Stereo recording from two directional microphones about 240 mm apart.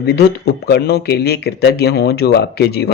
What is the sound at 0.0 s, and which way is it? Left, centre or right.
A man's voice, left.